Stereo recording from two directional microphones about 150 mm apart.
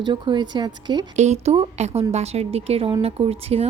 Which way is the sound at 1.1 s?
50° right (ahead or behind).